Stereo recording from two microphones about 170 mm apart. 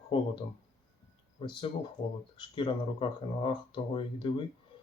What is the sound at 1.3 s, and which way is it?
Speech, 30° left (ahead or behind).